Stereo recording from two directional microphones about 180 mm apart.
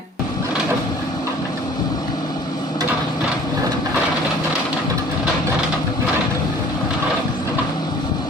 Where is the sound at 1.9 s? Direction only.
20° left (ahead or behind).